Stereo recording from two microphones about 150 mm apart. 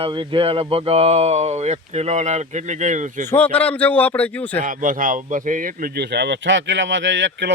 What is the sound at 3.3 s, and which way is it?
A man's voice, 10° left (ahead or behind).